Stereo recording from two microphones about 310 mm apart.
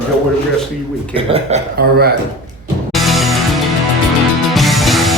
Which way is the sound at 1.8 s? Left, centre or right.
Right.